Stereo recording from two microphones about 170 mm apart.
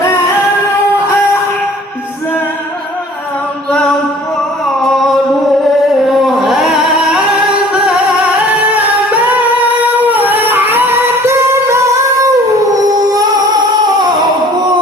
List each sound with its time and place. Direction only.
3.7 s mantra: 5° left (ahead or behind)
4.6 s a sound: centre (ahead or behind)
6.1 s singing: centre (ahead or behind)
8.7 s music: 10° right (ahead or behind); by 14.7 s 25° right (ahead or behind)